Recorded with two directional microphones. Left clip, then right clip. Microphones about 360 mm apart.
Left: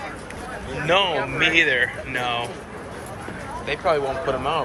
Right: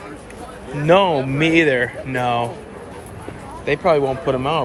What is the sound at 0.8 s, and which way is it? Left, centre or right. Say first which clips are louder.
Speech: right 6 dB; centre.